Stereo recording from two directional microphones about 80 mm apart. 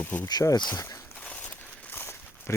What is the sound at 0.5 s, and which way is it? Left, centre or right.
Speech, left.